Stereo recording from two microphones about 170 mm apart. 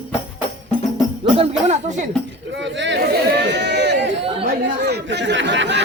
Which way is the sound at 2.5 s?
90° right.